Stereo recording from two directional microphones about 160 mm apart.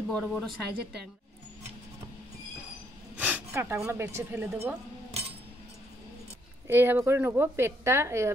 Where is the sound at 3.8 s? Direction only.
15° right (ahead or behind).